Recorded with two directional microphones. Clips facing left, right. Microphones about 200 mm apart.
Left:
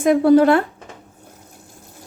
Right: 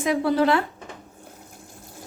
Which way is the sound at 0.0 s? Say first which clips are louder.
Left 8 dB; 50° left (ahead or behind).